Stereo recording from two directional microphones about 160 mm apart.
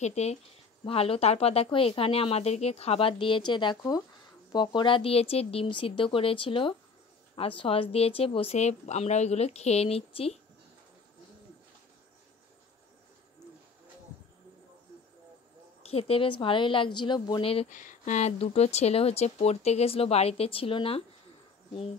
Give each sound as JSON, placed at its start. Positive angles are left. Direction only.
{"t": 0.0, "sound": "speech", "side_deg": 45}
{"t": 15.8, "sound": "speech", "side_deg": 40}
{"t": 17.7, "sound": "speech", "side_deg": 50}